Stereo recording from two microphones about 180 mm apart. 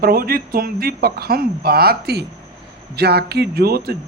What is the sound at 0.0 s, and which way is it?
Speech, 55° right (ahead or behind).